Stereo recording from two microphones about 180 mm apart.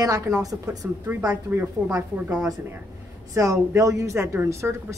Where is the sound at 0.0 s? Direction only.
20° right (ahead or behind).